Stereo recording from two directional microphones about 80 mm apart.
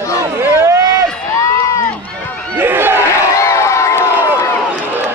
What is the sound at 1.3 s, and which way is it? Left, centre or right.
Run, left.